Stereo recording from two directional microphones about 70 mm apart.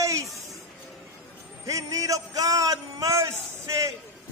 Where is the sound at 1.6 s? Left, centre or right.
Right.